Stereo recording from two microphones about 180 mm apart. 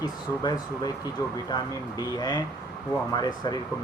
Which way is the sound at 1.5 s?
20° left (ahead or behind).